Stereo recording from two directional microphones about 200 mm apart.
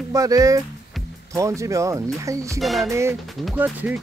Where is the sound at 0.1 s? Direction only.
15° right (ahead or behind).